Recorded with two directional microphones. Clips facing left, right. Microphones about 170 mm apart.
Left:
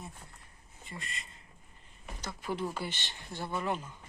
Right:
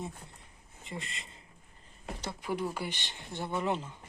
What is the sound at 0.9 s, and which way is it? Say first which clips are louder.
Speech: right 3 dB; 25° right (ahead or behind).